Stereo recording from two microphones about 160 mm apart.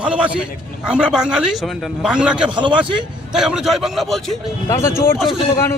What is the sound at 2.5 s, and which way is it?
Speech, 30° right (ahead or behind).